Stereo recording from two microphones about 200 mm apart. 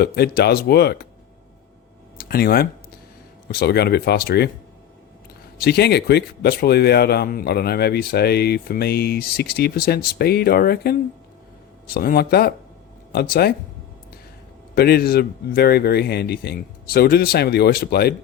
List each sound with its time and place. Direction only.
0.0 s speech: 50° left (ahead or behind)
2.1 s speech: 50° left (ahead or behind)
5.5 s speech: 55° left (ahead or behind)
11.9 s speech: 50° left (ahead or behind)
14.8 s speech: 50° left (ahead or behind)